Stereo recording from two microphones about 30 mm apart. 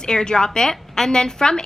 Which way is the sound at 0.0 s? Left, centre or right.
Left.